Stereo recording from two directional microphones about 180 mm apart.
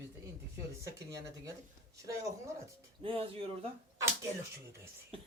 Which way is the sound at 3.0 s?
30° right (ahead or behind).